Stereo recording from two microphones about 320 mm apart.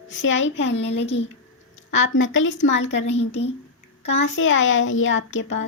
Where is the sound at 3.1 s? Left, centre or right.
Centre.